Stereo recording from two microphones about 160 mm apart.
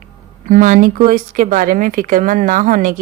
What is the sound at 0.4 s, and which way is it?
Speech, 55° right (ahead or behind).